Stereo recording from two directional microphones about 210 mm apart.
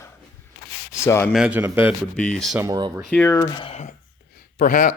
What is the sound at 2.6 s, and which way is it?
Speech, 20° right (ahead or behind).